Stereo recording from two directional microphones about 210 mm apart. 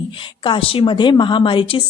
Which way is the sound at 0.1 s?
25° left (ahead or behind).